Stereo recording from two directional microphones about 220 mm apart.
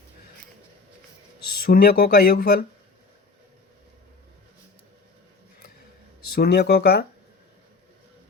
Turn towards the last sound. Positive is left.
turn(degrees=45)  # may be behind; listen again after turning